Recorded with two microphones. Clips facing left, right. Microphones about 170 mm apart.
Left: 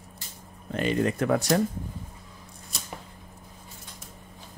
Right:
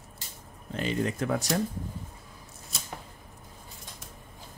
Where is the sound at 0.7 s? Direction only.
60° left (ahead or behind).